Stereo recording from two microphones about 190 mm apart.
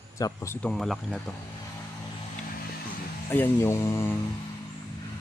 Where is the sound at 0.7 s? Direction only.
Centre (ahead or behind).